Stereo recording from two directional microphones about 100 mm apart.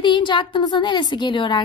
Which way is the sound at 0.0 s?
50° left (ahead or behind).